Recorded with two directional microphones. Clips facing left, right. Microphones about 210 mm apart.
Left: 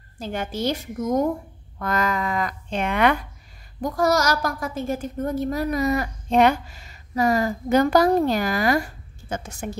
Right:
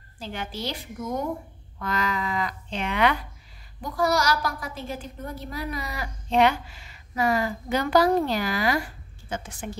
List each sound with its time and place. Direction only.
0.2 s a child's voice: 45° left (ahead or behind)